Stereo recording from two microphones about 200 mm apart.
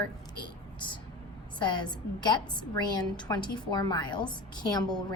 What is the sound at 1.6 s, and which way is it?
A woman's voice, 20° left (ahead or behind).